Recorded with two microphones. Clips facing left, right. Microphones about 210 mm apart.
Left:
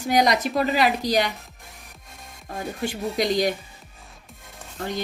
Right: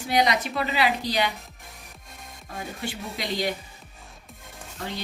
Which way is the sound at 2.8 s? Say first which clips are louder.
Left 10 dB; 45° left (ahead or behind).